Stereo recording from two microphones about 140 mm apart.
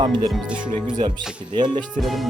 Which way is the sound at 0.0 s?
30° right (ahead or behind).